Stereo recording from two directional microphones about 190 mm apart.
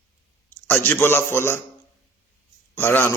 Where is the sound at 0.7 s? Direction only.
10° left (ahead or behind).